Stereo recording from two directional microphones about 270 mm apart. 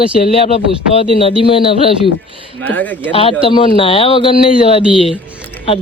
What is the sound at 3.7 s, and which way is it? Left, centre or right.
Speech, centre.